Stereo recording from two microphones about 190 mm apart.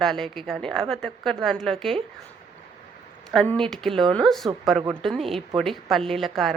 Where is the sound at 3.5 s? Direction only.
5° left (ahead or behind).